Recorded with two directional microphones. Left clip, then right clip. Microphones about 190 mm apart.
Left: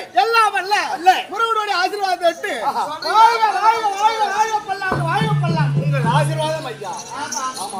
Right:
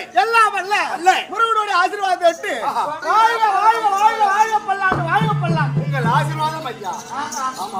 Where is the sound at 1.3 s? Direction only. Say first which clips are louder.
Right 2 dB; 5° left (ahead or behind).